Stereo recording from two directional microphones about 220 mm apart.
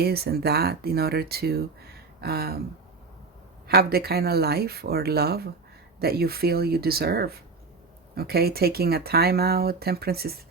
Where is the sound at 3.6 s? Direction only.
45° right (ahead or behind).